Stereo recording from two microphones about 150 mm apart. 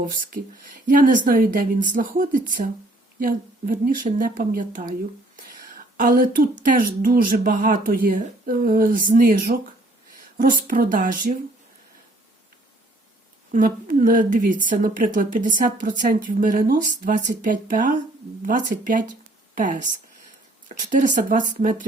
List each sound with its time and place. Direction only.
0.9 s a woman's voice: 60° right (ahead or behind)
13.5 s a woman's voice: 65° right (ahead or behind)